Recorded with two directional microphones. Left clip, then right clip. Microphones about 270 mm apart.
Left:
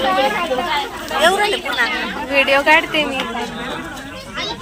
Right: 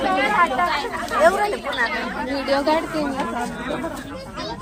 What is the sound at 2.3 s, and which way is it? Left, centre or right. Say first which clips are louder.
Speech: left 8 dB; left.